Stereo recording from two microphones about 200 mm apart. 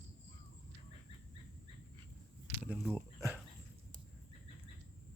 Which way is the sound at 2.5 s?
10° right (ahead or behind).